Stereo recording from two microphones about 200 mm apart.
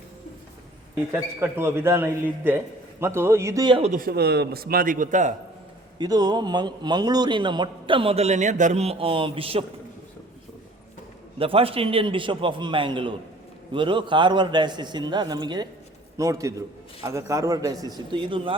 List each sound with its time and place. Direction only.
1.1 s a man's voice: 10° right (ahead or behind)
3.9 s speech: 50° right (ahead or behind)
6.0 s a man's voice: 20° right (ahead or behind)
11.3 s a man's voice: 30° right (ahead or behind)